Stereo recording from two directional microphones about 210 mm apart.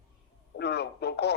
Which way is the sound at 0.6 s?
55° left (ahead or behind).